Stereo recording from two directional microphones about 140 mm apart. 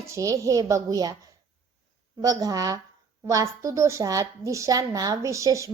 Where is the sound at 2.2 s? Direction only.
25° right (ahead or behind).